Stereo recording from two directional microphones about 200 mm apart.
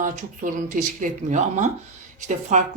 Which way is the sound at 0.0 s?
40° right (ahead or behind).